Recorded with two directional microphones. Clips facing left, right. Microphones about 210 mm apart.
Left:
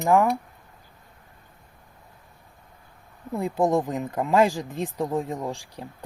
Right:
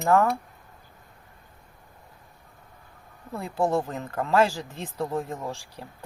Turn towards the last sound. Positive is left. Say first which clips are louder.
# left 3 dB
turn(degrees=15)  # may be behind; listen again after turning